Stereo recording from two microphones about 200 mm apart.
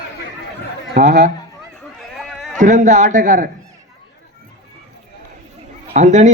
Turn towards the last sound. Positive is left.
turn(degrees=-35)  # may be behind; listen again after turning